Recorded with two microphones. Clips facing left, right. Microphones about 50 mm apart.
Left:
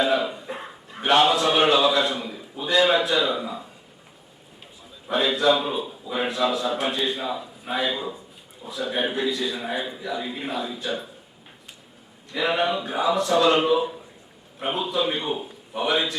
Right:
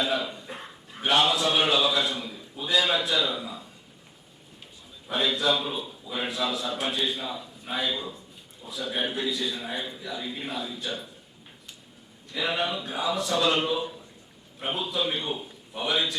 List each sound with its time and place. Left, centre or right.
0.0 s cough: centre
0.9 s a man's voice: centre
2.3 s a sound: centre
2.7 s a man's voice: centre
5.0 s a man's voice: centre
12.3 s a man's voice: centre